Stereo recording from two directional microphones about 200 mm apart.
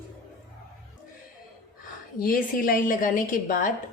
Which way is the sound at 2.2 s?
45° left (ahead or behind).